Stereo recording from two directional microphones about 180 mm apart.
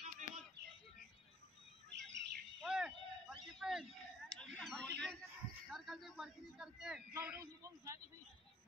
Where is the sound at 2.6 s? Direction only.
5° right (ahead or behind).